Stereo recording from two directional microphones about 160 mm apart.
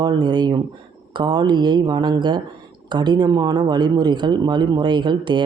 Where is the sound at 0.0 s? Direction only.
30° right (ahead or behind).